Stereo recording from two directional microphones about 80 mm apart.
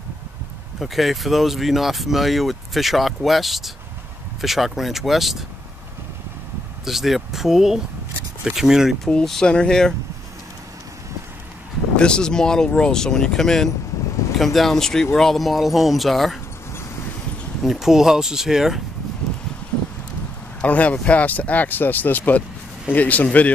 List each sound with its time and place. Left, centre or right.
0.7 s speech: centre
6.8 s speech: centre
12.0 s speech: centre
17.6 s speech: centre
20.6 s speech: centre